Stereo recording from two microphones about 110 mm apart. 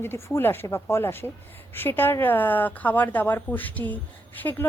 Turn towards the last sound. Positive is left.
turn(degrees=15)  # may be behind; listen again after turning